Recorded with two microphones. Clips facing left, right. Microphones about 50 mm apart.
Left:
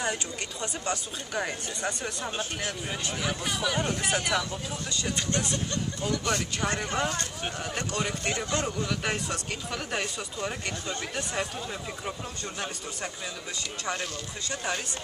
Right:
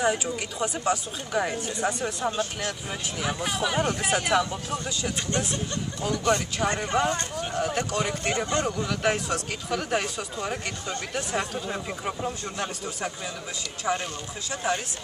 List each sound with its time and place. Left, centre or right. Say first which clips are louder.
0.0 s speech: right 6 dB; centre
6.0 s speech: right 5 dB; centre
8.3 s speech: right 4 dB; centre
8.6 s speech: right 4 dB; centre
11.6 s speech: right 4 dB; centre
13.9 s speech: right 6 dB; centre